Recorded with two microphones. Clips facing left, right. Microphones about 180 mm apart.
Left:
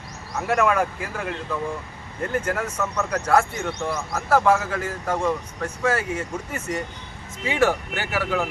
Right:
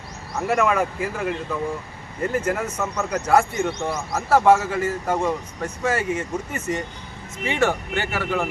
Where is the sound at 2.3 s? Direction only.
5° right (ahead or behind).